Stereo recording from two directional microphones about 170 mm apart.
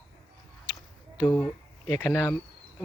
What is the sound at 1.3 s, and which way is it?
Speech, 15° left (ahead or behind).